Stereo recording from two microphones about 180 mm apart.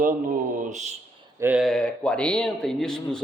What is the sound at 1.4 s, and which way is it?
Speech, 5° right (ahead or behind).